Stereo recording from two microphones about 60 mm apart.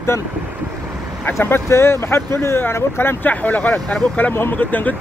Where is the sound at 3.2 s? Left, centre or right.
Left.